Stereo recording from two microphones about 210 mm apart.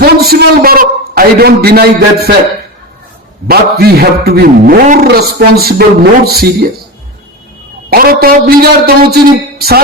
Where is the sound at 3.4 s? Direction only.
50° right (ahead or behind).